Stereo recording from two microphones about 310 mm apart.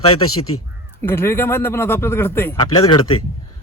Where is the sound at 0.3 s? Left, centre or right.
Left.